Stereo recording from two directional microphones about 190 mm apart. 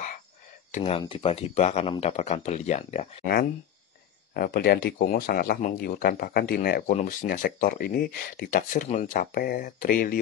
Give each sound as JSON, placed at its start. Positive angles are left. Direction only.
{"t": 0.7, "sound": "speech", "side_deg": 35}
{"t": 4.3, "sound": "speech", "side_deg": 50}